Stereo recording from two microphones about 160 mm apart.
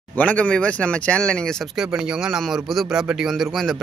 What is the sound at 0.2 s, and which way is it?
Speech, 10° left (ahead or behind).